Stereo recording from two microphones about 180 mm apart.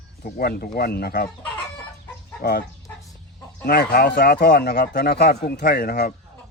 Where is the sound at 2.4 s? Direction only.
55° left (ahead or behind).